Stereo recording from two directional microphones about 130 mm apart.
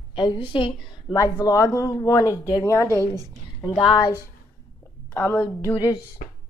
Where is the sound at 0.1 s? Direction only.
40° left (ahead or behind).